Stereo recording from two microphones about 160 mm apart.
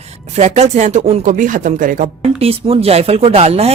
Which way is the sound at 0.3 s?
45° right (ahead or behind).